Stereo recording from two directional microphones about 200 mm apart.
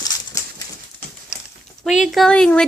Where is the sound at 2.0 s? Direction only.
Centre (ahead or behind).